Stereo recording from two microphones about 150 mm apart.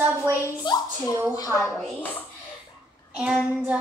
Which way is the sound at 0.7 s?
30° left (ahead or behind).